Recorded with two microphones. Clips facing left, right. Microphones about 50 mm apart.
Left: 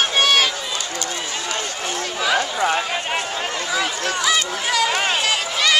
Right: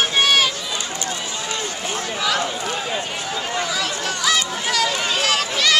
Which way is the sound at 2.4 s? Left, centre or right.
Left.